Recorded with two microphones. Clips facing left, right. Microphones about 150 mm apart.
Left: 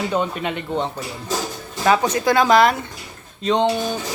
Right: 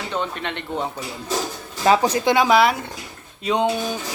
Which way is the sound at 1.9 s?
25° right (ahead or behind).